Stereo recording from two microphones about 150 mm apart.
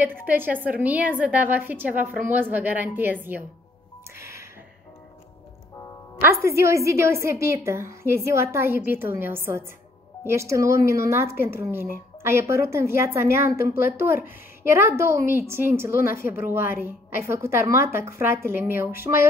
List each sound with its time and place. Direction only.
0.0 s speech: 15° right (ahead or behind)
4.2 s a sound: 20° right (ahead or behind)
6.4 s speech: 20° right (ahead or behind)
16.1 s a woman's voice: 75° left (ahead or behind)
16.3 s speech: 15° right (ahead or behind)